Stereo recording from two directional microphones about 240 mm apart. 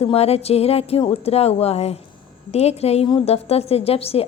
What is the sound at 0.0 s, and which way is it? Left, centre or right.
A woman's voice, left.